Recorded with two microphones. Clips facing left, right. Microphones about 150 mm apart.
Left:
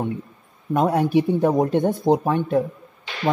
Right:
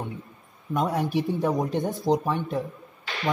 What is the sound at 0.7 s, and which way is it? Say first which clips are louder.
Speech: left 7 dB; 60° left (ahead or behind).